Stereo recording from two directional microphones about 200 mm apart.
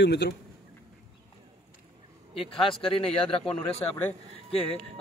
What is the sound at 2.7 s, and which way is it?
Speech, 30° left (ahead or behind).